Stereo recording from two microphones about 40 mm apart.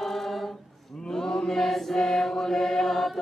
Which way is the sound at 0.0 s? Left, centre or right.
Centre.